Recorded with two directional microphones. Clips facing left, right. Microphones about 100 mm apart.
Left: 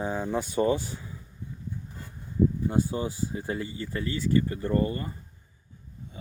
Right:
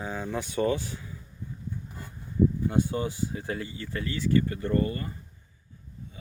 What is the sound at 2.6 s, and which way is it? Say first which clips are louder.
Speech: even; 15° left (ahead or behind).